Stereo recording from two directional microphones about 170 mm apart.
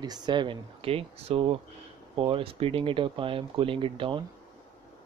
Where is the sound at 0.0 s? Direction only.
25° right (ahead or behind).